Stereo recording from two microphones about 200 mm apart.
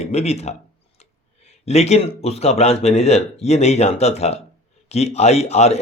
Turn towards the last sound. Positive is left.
turn(degrees=30)  # may be behind; listen again after turning